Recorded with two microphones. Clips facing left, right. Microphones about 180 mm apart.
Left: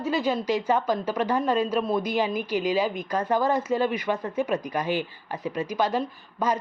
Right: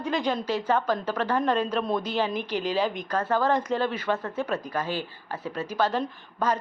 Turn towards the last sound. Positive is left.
turn(degrees=10)  # may be behind; listen again after turning